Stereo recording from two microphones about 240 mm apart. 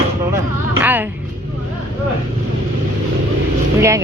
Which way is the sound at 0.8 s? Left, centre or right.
Centre.